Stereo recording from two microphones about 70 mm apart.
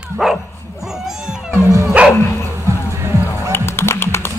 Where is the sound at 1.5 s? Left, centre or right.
Left.